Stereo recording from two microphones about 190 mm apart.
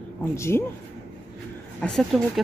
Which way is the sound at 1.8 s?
Centre (ahead or behind).